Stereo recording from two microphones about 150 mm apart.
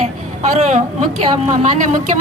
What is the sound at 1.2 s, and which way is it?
Speech, 45° right (ahead or behind).